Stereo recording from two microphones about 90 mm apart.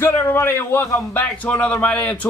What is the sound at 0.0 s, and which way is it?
A man's voice, 25° left (ahead or behind).